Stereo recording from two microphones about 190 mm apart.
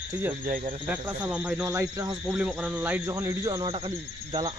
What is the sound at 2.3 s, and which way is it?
Speech, 5° right (ahead or behind).